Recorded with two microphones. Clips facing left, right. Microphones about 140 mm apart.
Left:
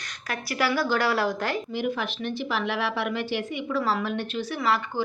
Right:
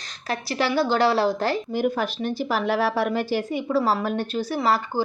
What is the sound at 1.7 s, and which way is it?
A woman's voice, 40° right (ahead or behind).